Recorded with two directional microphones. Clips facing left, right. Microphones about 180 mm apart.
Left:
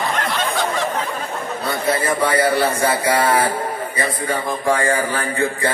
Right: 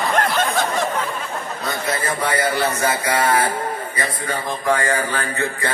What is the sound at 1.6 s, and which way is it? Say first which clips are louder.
Speech: left 4 dB; 30° left (ahead or behind).